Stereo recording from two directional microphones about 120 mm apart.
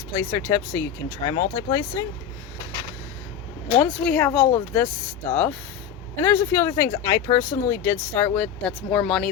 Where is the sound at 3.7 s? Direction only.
20° left (ahead or behind).